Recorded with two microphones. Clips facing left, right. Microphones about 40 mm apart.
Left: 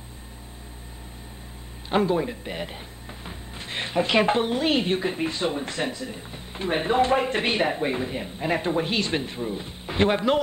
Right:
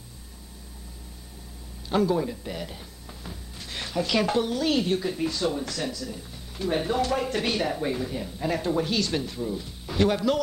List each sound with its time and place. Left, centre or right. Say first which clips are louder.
1.9 s a woman's voice: left 1 dB; left